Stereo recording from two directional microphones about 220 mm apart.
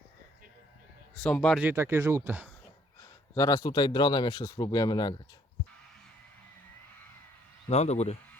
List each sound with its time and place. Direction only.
1.2 s speech: 5° left (ahead or behind)
1.6 s speech: 10° right (ahead or behind)
3.0 s speech: 15° left (ahead or behind)
7.7 s speech: 30° left (ahead or behind)